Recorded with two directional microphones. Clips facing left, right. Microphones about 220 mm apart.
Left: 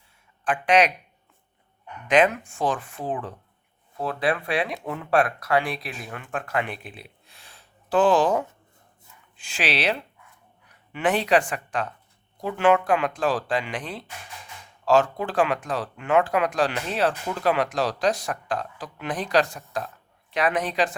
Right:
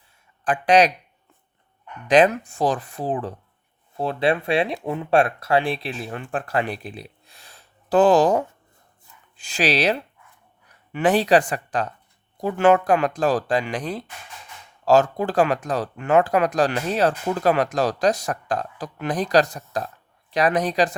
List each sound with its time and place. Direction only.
0.4 s speech: 35° right (ahead or behind)
2.0 s speech: 35° right (ahead or behind)